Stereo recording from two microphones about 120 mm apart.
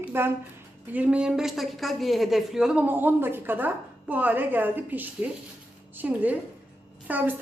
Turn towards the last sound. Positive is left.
turn(degrees=-15)  # may be behind; listen again after turning